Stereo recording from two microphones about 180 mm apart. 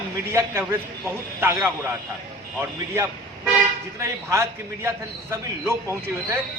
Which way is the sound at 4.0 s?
15° right (ahead or behind).